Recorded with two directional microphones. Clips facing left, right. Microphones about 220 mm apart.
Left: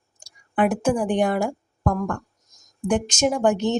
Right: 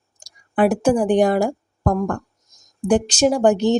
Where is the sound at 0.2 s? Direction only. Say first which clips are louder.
Right 4 dB; 35° right (ahead or behind).